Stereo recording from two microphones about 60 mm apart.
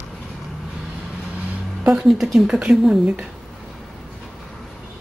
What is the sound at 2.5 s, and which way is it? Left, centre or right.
Speech, centre.